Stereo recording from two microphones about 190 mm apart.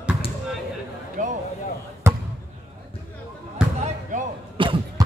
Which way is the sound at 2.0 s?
15° right (ahead or behind).